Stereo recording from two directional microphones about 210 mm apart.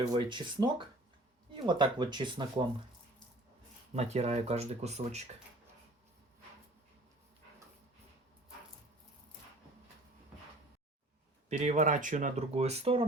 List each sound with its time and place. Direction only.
0.0 s speech: 20° right (ahead or behind)
3.9 s speech: 30° right (ahead or behind)
11.4 s speech: 35° right (ahead or behind)